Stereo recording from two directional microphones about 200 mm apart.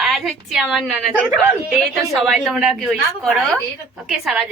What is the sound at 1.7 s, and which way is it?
A woman's voice, centre (ahead or behind).